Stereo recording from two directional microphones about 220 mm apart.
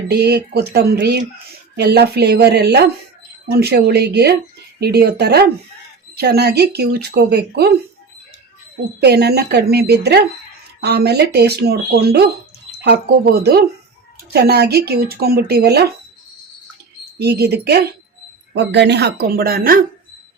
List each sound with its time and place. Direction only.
0.1 s speech: 45° right (ahead or behind)
9.0 s speech: 45° right (ahead or behind)
17.2 s speech: 45° right (ahead or behind)